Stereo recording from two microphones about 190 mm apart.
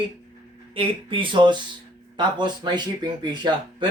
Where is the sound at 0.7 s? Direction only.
25° right (ahead or behind).